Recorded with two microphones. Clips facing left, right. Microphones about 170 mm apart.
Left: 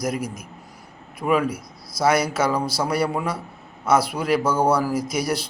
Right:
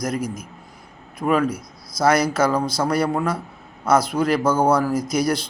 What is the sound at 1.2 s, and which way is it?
A man's voice, 5° left (ahead or behind).